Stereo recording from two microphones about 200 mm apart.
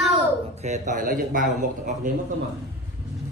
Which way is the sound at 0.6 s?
35° right (ahead or behind).